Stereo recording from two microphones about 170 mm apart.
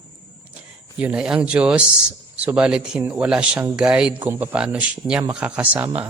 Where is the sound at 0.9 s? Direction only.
5° right (ahead or behind).